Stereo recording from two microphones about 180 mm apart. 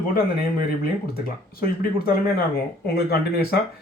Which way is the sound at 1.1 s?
55° left (ahead or behind).